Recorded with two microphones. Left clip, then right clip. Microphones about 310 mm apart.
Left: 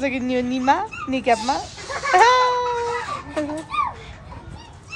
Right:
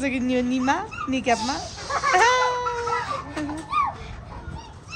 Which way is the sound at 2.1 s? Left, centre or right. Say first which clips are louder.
Left 5 dB; centre.